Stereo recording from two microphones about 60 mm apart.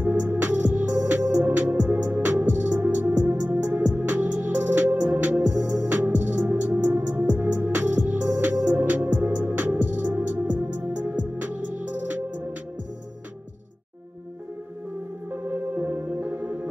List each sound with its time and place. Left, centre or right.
0.0 s music: right
15.3 s music: right